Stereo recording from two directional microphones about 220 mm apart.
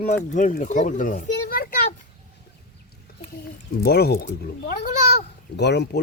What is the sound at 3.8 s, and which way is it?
Speech, 45° left (ahead or behind).